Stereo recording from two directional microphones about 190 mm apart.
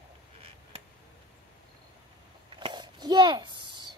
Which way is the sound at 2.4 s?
25° right (ahead or behind).